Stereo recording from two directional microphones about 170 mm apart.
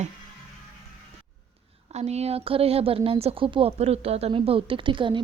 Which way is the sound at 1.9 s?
40° right (ahead or behind).